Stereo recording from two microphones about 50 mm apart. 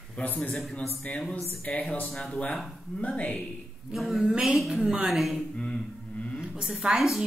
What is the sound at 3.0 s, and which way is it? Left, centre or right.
Speech, left.